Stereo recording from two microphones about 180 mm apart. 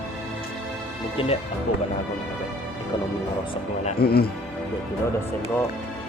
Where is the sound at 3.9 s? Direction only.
60° left (ahead or behind).